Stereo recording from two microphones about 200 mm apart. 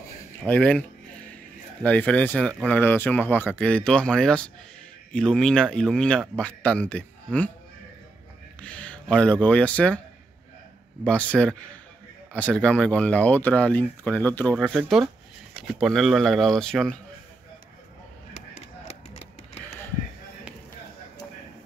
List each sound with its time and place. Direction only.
0.5 s speech: 5° left (ahead or behind)
8.5 s speech: 5° left (ahead or behind)
11.1 s speech: 5° left (ahead or behind)
18.3 s a sound: 35° left (ahead or behind)